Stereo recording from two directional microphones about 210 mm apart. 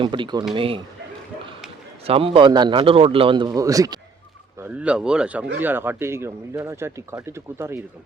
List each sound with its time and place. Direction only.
0.0 s a man's voice: 25° right (ahead or behind)
2.0 s a man's voice: 25° right (ahead or behind)
4.6 s speech: 5° right (ahead or behind)